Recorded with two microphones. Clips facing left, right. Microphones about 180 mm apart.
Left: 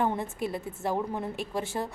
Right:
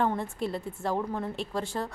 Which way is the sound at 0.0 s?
20° left (ahead or behind).